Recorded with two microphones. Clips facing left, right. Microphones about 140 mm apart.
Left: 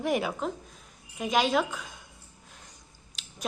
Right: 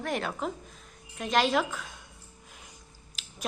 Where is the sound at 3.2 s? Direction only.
Centre (ahead or behind).